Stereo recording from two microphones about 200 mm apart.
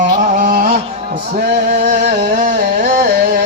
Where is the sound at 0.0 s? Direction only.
40° right (ahead or behind).